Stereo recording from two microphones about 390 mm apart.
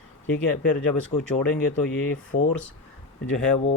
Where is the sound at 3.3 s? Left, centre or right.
Centre.